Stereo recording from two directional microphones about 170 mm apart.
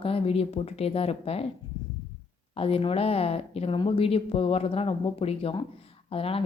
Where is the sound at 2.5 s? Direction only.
35° left (ahead or behind).